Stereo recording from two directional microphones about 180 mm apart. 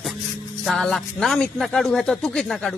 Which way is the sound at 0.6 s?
5° left (ahead or behind).